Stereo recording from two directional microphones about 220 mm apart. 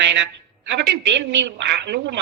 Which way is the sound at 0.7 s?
50° right (ahead or behind).